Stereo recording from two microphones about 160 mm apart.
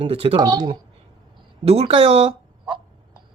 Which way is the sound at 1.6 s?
40° right (ahead or behind).